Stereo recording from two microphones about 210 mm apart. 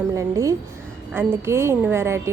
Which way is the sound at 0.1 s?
15° right (ahead or behind).